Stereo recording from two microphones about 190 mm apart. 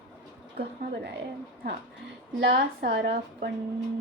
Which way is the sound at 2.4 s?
60° right (ahead or behind).